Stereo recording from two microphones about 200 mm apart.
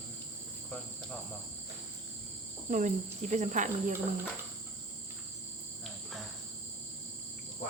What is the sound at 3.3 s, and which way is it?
Speech, 40° right (ahead or behind).